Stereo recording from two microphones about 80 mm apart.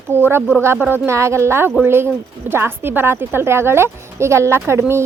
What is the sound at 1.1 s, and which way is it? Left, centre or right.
Speech, right.